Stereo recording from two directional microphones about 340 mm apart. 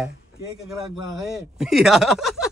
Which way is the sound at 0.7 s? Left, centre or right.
Centre.